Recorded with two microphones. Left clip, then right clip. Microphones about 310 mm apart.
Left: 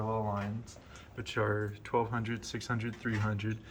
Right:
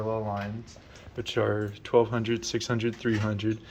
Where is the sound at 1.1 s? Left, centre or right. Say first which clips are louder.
Right 6 dB; right.